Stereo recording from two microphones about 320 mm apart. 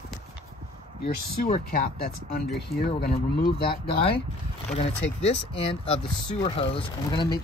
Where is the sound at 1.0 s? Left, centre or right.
Left.